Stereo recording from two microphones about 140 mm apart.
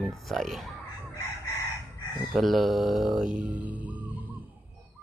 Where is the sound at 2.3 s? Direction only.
Centre (ahead or behind).